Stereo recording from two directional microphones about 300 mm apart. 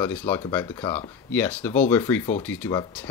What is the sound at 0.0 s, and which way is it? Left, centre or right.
Speech, centre.